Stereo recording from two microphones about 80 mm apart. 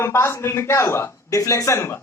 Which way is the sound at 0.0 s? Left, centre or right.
Left.